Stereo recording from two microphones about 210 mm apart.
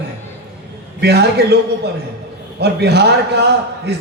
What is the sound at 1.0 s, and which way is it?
Speech, 50° right (ahead or behind).